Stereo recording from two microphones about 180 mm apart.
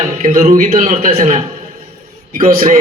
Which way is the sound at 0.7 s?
50° right (ahead or behind).